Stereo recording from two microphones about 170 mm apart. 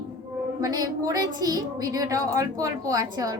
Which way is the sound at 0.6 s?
20° right (ahead or behind).